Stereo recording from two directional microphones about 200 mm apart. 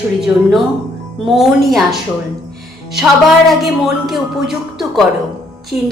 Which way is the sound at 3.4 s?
Centre (ahead or behind).